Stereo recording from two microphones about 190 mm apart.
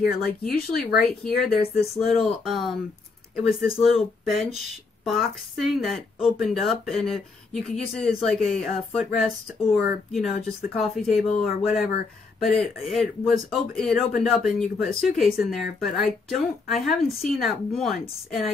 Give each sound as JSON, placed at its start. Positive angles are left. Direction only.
{"t": 0.0, "sound": "speech", "side_deg": 55}
{"t": 1.8, "sound": "a woman's voice", "side_deg": 0}